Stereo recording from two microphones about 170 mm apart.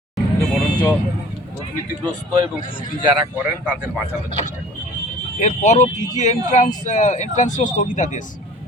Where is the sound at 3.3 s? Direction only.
5° right (ahead or behind).